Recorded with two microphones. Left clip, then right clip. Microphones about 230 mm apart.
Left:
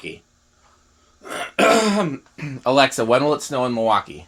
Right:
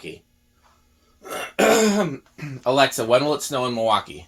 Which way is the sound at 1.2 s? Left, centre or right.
Left.